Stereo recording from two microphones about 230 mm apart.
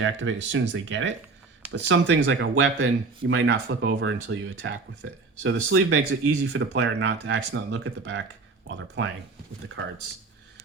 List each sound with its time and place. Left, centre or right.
0.0 s speech: right